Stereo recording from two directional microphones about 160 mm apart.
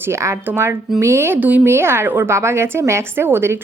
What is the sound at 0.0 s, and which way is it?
A woman's voice, 15° right (ahead or behind).